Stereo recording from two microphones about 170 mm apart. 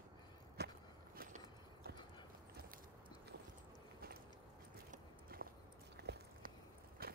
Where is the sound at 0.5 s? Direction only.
65° right (ahead or behind).